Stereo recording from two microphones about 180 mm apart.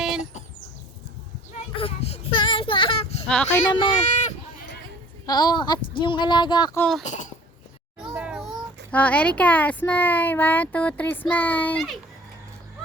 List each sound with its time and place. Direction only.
0.0 s chicken: 5° right (ahead or behind)
1.5 s child singing: 30° left (ahead or behind)
3.7 s speech: 25° left (ahead or behind)
4.1 s run: 40° left (ahead or behind)
5.2 s speech: 20° left (ahead or behind)
6.7 s speech: 5° left (ahead or behind)
7.0 s babbling: 40° left (ahead or behind)
8.1 s children playing: 5° right (ahead or behind)
8.9 s speech: 10° left (ahead or behind)